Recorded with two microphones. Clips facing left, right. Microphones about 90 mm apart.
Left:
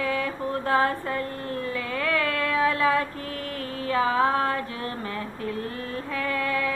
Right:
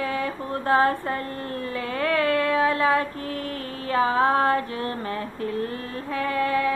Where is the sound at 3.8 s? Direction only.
35° right (ahead or behind).